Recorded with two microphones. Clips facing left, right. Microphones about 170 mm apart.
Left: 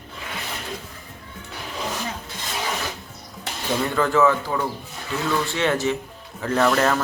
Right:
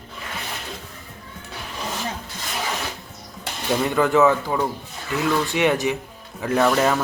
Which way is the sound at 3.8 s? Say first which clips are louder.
Right 2 dB; 20° right (ahead or behind).